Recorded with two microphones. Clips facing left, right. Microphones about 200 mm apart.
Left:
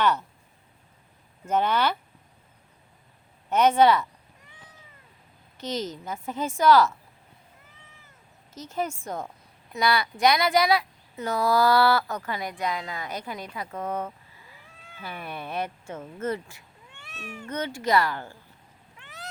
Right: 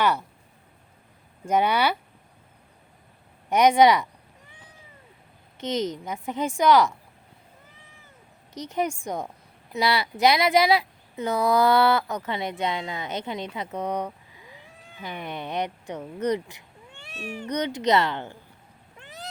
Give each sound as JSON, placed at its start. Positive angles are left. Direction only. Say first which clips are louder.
{"t": 0.0, "sound": "speech", "louder": "right 1 dB", "side_deg": -10}
{"t": 1.5, "sound": "speech", "louder": "right 2 dB", "side_deg": -10}
{"t": 3.5, "sound": "speech", "louder": "right 2 dB", "side_deg": -15}
{"t": 5.5, "sound": "speech", "louder": "right 4 dB", "side_deg": -20}
{"t": 8.5, "sound": "speech", "louder": "right 3 dB", "side_deg": -15}
{"t": 16.9, "sound": "cat", "louder": "right 5 dB", "side_deg": -30}
{"t": 17.4, "sound": "speech", "louder": "right 4 dB", "side_deg": -20}
{"t": 18.9, "sound": "cat", "louder": "right 4 dB", "side_deg": -35}